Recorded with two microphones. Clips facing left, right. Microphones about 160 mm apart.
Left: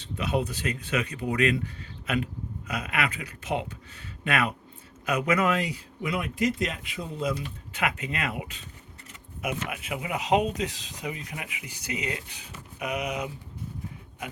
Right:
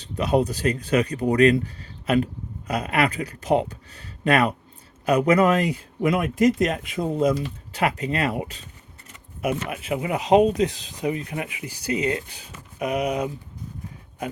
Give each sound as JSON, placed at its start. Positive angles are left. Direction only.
{"t": 0.0, "sound": "speech", "side_deg": -40}
{"t": 5.5, "sound": "speech", "side_deg": -50}
{"t": 7.7, "sound": "speech", "side_deg": -35}